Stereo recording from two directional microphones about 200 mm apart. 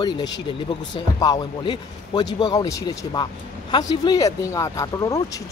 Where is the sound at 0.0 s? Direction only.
20° left (ahead or behind).